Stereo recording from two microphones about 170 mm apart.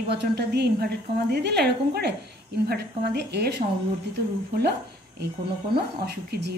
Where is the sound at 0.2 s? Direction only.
75° right (ahead or behind).